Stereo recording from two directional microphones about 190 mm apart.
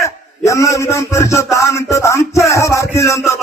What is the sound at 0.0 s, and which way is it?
A man's voice, 15° left (ahead or behind).